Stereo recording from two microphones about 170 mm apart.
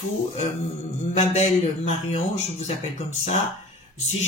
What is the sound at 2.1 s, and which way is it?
Speech, 40° left (ahead or behind).